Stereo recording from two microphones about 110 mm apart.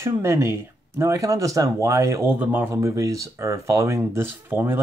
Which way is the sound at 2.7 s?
30° right (ahead or behind).